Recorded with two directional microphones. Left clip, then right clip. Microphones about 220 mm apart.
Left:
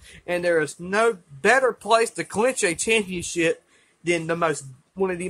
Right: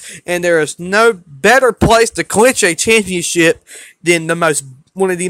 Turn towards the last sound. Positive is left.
turn(degrees=-40)  # may be behind; listen again after turning